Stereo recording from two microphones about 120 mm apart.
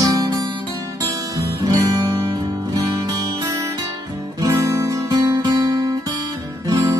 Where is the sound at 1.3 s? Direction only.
30° right (ahead or behind).